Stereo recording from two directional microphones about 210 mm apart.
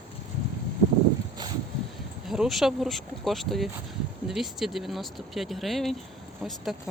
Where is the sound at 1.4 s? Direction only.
20° right (ahead or behind).